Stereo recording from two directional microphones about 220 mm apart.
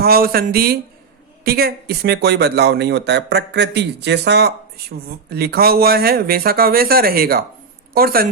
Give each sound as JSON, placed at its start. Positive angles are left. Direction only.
{"t": 0.0, "sound": "a man's voice", "side_deg": -45}